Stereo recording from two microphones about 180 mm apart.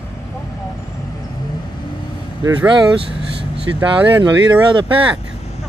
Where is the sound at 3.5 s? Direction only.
10° right (ahead or behind).